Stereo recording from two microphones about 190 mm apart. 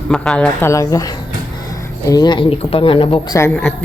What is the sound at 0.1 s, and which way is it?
Speech, 5° left (ahead or behind).